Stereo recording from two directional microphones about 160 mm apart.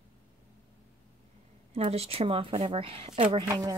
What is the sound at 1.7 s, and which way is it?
Speech, 40° right (ahead or behind).